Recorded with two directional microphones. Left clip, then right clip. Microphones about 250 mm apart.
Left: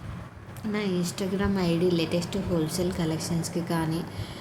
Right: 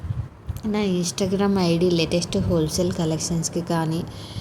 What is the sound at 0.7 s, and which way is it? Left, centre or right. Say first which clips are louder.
A woman's voice: right 5 dB; centre.